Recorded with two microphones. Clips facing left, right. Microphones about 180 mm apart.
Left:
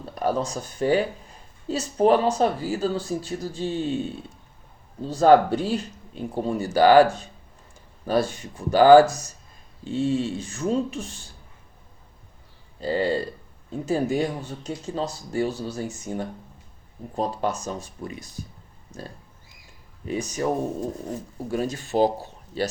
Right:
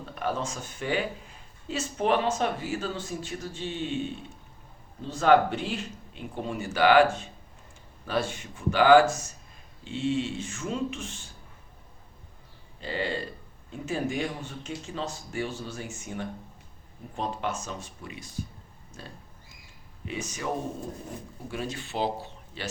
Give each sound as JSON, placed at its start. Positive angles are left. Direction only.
{"t": 0.1, "sound": "speech", "side_deg": 40}
{"t": 5.0, "sound": "speech", "side_deg": 35}
{"t": 12.8, "sound": "speech", "side_deg": 40}
{"t": 20.1, "sound": "speech", "side_deg": 40}
{"t": 21.5, "sound": "speech", "side_deg": 40}